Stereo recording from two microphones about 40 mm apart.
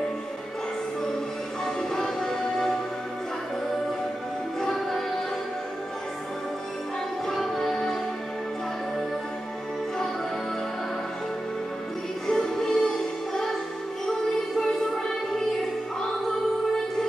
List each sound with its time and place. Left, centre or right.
1.8 s music: centre
4.6 s music: centre
7.2 s music: centre
12.3 s music: centre
14.6 s music: centre